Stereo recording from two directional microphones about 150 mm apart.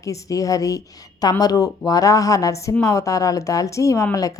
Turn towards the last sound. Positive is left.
turn(degrees=20)  # may be behind; listen again after turning